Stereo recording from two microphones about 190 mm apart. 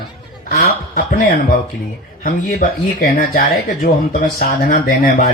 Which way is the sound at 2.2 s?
45° left (ahead or behind).